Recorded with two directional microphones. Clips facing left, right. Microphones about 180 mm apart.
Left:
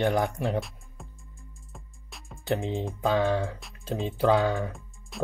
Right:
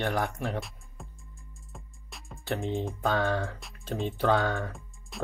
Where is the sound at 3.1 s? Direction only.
15° left (ahead or behind).